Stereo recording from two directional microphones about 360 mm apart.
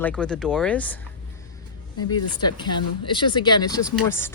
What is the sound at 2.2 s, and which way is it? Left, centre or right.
Speech, left.